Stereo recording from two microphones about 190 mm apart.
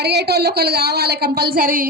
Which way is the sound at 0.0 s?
60° right (ahead or behind).